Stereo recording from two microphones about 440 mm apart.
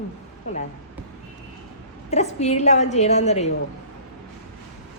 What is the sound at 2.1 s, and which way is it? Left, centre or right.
A woman's voice, centre.